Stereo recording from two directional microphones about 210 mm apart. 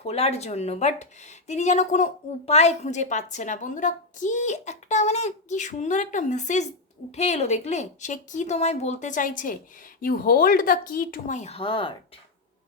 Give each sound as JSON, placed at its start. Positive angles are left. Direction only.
{"t": 0.0, "sound": "a woman's voice", "side_deg": 30}